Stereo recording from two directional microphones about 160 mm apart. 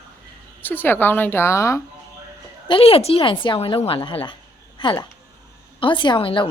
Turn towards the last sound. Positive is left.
turn(degrees=35)  # may be behind; listen again after turning